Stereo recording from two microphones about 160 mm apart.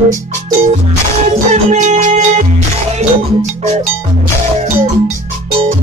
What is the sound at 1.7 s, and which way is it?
Music, 50° right (ahead or behind).